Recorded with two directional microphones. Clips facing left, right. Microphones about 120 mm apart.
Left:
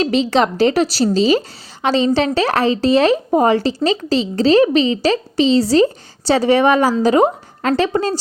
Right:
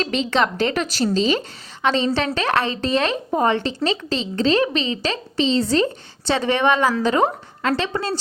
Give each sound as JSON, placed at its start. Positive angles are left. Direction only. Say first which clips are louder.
{"t": 0.0, "sound": "a woman's voice", "louder": "left 5 dB", "side_deg": 35}